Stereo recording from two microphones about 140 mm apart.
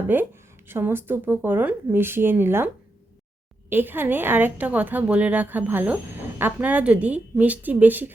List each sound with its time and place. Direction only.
0.1 s speech: 15° right (ahead or behind)
3.7 s speech: 15° right (ahead or behind)